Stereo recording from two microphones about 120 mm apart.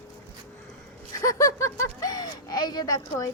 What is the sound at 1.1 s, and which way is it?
Speech, 25° left (ahead or behind).